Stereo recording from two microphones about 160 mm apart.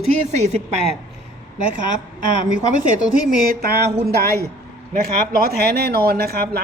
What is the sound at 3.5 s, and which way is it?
Speech, 70° right (ahead or behind).